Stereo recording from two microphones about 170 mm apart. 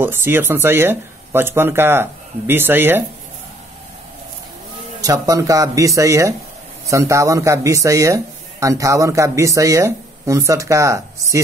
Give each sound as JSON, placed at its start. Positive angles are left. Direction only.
{"t": 0.0, "sound": "speech", "side_deg": -15}
{"t": 5.0, "sound": "speech", "side_deg": -20}